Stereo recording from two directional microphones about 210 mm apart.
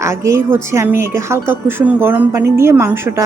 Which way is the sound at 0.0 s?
15° right (ahead or behind).